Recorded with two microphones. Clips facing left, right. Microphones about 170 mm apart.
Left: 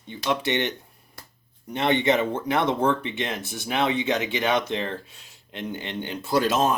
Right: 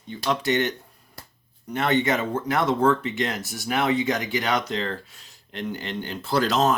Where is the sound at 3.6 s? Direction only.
20° left (ahead or behind).